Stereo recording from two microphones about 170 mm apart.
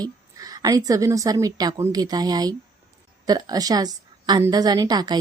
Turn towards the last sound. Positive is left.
turn(degrees=-25)  # may be behind; listen again after turning